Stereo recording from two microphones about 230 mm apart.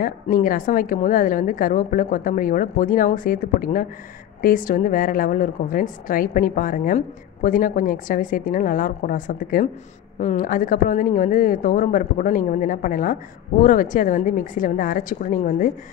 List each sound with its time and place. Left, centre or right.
0.0 s speech: left